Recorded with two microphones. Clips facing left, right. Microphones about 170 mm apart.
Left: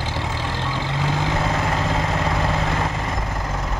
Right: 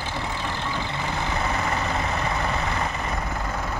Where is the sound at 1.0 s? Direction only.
90° left.